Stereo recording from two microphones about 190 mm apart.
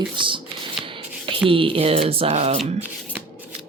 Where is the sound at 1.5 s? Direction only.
30° right (ahead or behind).